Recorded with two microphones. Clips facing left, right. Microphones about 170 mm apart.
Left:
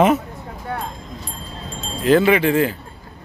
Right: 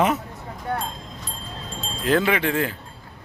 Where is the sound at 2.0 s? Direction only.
Centre (ahead or behind).